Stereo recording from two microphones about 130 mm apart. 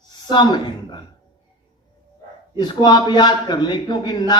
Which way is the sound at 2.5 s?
35° left (ahead or behind).